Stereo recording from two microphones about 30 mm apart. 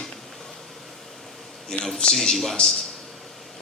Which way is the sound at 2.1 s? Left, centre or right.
Centre.